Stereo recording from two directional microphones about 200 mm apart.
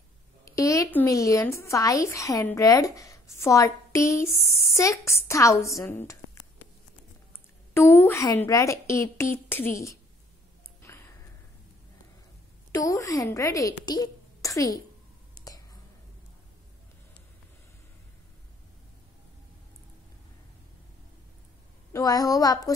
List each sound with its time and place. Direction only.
0.5 s a woman's voice: 15° left (ahead or behind)
7.7 s a woman's voice: 10° left (ahead or behind)
12.7 s a woman's voice: 15° left (ahead or behind)
15.3 s clicking: 20° left (ahead or behind)
21.9 s a woman's voice: 20° left (ahead or behind)